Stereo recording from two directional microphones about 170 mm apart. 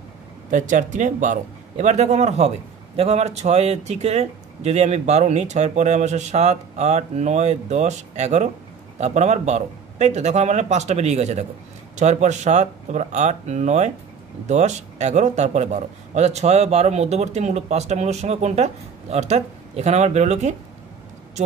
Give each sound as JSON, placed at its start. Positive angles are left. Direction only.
{"t": 0.5, "sound": "a man's voice", "side_deg": -50}